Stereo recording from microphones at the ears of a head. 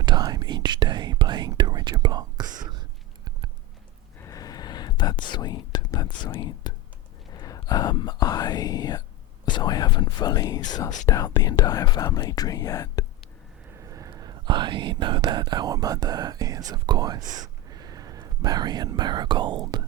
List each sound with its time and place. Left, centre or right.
0.0 s whispering: right
4.2 s whispering: left
13.7 s speech: right